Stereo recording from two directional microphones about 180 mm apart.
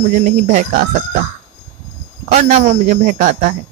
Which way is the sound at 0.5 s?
45° right (ahead or behind).